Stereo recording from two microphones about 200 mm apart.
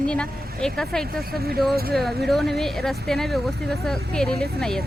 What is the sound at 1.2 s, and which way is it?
Speech, 50° right (ahead or behind).